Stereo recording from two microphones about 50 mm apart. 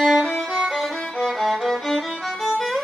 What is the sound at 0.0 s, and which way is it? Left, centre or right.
Violin, centre.